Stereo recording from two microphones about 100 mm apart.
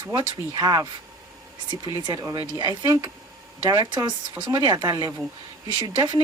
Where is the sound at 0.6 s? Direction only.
40° right (ahead or behind).